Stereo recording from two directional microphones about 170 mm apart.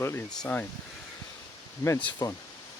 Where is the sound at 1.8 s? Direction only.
10° left (ahead or behind).